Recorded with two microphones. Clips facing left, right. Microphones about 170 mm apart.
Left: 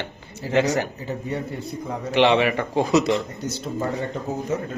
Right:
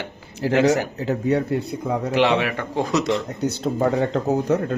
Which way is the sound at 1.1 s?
75° right (ahead or behind).